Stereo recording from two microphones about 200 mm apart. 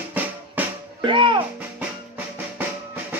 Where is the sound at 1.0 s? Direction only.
25° right (ahead or behind).